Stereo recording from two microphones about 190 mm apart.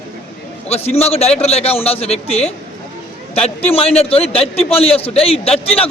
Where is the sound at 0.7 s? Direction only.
35° left (ahead or behind).